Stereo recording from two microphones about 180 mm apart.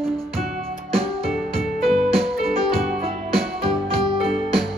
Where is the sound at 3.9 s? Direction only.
30° right (ahead or behind).